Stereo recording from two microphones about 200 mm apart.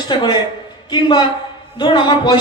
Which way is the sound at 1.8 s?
25° left (ahead or behind).